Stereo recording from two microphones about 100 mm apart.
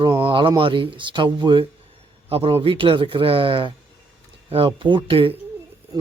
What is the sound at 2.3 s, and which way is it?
Speech, 70° right (ahead or behind).